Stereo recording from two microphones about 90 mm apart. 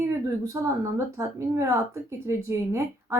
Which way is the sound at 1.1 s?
35° right (ahead or behind).